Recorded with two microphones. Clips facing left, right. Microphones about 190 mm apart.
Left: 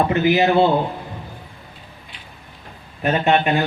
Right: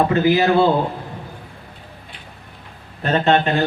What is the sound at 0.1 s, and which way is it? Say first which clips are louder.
Speech: right 1 dB; 20° left (ahead or behind).